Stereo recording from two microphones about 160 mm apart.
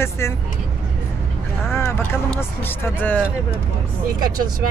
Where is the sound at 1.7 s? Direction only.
15° left (ahead or behind).